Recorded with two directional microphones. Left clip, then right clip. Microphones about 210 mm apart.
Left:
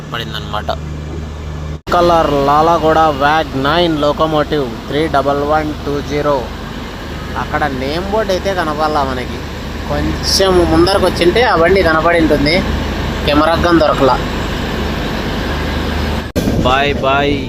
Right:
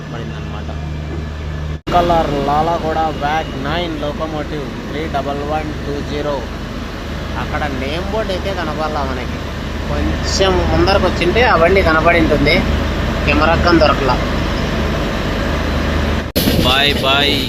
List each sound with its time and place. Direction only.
2.0 s speech: 30° left (ahead or behind)
7.6 s speech: 25° left (ahead or behind)
10.3 s speech: 25° left (ahead or behind)
16.6 s speech: 30° left (ahead or behind)